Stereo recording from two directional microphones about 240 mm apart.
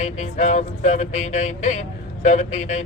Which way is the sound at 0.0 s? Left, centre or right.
Left.